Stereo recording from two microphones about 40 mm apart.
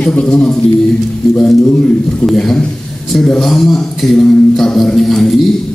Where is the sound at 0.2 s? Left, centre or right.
Left.